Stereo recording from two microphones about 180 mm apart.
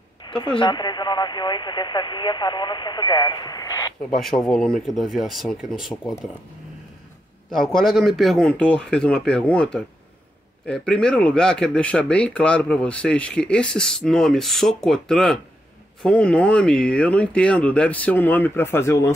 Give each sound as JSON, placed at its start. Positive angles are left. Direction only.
{"t": 0.3, "sound": "a sound", "side_deg": 25}
{"t": 0.6, "sound": "speech", "side_deg": 25}
{"t": 4.0, "sound": "speech", "side_deg": 0}
{"t": 7.5, "sound": "speech", "side_deg": 0}